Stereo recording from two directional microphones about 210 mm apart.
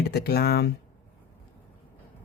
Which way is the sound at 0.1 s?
50° left (ahead or behind).